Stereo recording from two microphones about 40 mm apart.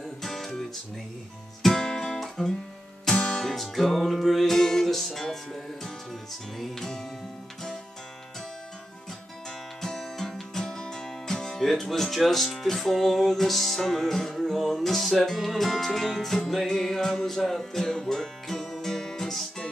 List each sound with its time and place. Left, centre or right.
0.2 s music: centre
1.9 s guitar: centre
2.1 s guitar: centre
3.1 s music: left
3.4 s music: centre
9.8 s music: centre
11.6 s speech: centre
14.7 s music: centre